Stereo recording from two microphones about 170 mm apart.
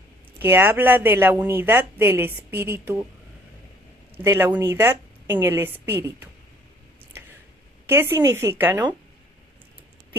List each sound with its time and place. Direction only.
0.4 s a woman's voice: 10° right (ahead or behind)
4.2 s a woman's voice: 15° right (ahead or behind)
7.9 s a woman's voice: 15° right (ahead or behind)